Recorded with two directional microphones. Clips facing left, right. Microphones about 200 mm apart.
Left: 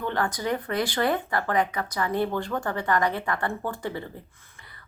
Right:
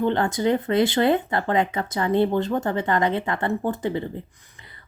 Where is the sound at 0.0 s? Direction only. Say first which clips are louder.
Right 7 dB; 25° right (ahead or behind).